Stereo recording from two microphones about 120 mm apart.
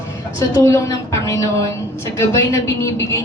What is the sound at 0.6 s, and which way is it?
A woman's voice, 25° left (ahead or behind).